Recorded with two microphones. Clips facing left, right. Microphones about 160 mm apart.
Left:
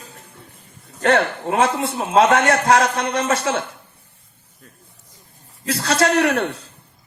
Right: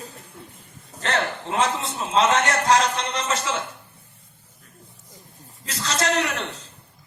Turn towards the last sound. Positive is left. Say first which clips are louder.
# left 7 dB
turn(degrees=60)  # may be behind; listen again after turning